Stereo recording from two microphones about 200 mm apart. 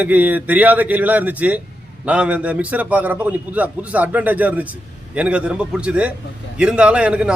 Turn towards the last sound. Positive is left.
turn(degrees=-5)  # may be behind; listen again after turning